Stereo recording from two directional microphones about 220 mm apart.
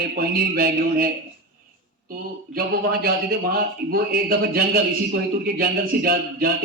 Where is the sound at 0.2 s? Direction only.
40° right (ahead or behind).